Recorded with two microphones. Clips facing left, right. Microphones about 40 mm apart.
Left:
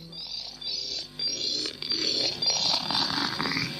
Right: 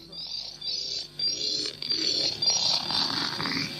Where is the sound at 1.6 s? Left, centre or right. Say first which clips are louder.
Even; centre.